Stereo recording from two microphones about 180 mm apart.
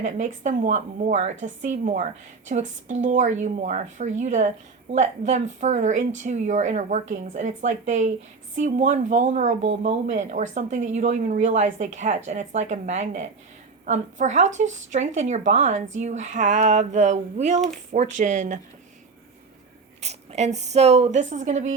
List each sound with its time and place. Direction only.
0.0 s speech: 45° right (ahead or behind)
20.0 s speech: 35° right (ahead or behind)